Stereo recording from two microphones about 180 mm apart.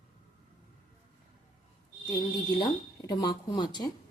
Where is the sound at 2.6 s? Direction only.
25° left (ahead or behind).